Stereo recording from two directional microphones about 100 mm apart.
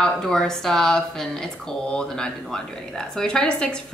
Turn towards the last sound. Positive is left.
turn(degrees=10)  # may be behind; listen again after turning